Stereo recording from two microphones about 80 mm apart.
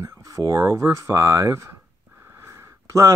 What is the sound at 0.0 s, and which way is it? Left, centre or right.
Speech, right.